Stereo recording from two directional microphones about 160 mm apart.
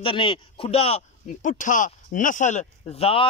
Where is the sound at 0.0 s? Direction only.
35° left (ahead or behind).